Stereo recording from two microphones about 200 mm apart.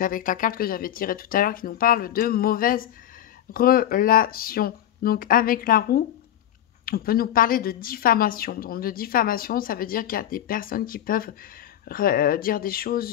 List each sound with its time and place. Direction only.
0.0 s a woman's voice: 45° left (ahead or behind)